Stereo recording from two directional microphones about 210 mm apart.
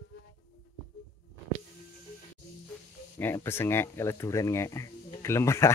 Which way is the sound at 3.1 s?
10° left (ahead or behind).